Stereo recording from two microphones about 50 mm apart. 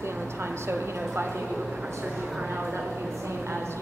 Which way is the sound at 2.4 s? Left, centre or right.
Right.